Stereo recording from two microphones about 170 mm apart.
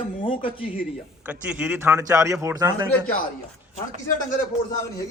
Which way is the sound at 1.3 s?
5° right (ahead or behind).